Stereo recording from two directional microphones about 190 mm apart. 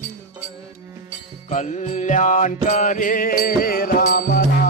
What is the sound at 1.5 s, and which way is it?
Music, 40° left (ahead or behind).